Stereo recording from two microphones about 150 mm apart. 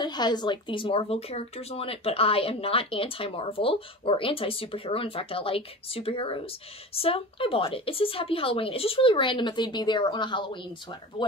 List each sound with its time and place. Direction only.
0.0 s a woman's voice: 30° left (ahead or behind)